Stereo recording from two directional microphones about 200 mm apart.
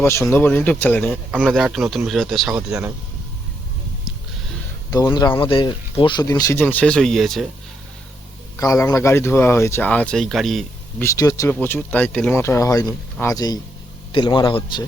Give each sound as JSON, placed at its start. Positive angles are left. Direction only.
{"t": 0.0, "sound": "a man's voice", "side_deg": 15}
{"t": 4.9, "sound": "speech", "side_deg": 20}
{"t": 8.5, "sound": "speech", "side_deg": 15}
{"t": 11.0, "sound": "a man's voice", "side_deg": 15}